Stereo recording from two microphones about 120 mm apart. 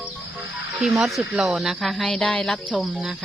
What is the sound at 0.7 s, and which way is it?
Speech, 5° right (ahead or behind).